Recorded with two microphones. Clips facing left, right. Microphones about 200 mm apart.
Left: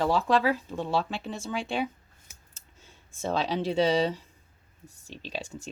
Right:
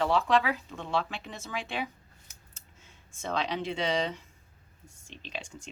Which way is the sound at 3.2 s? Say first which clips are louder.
Left 4 dB; 35° left (ahead or behind).